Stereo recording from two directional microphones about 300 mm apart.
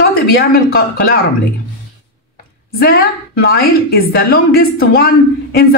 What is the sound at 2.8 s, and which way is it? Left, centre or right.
A woman's voice, left.